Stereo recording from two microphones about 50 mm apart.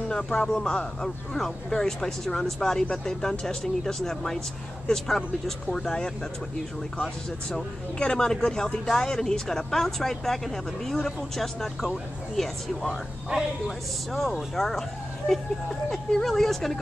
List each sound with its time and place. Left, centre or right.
0.1 s speech: centre
7.5 s speech: centre
13.3 s speech: centre
13.7 s speech: centre